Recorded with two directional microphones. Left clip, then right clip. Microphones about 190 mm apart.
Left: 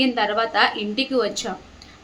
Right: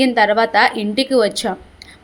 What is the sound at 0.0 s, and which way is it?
A woman's voice, 40° right (ahead or behind).